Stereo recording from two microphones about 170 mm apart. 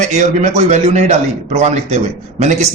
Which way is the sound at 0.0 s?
45° right (ahead or behind).